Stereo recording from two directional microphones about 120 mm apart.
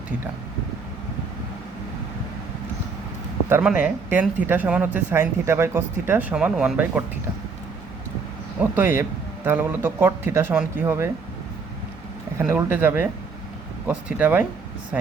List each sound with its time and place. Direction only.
3.6 s speech: 10° right (ahead or behind)
8.7 s speech: 15° right (ahead or behind)
12.4 s speech: 15° right (ahead or behind)